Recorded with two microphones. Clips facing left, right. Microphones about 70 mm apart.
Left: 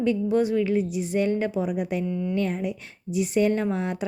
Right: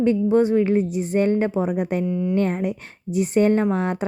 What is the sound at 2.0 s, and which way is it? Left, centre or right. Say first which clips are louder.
Speech: right 5 dB; centre.